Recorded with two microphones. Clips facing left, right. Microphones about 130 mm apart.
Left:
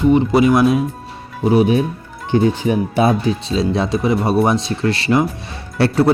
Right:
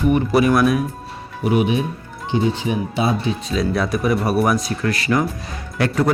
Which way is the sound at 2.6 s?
50° left (ahead or behind).